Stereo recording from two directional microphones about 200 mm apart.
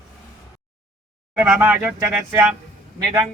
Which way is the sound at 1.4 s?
5° right (ahead or behind).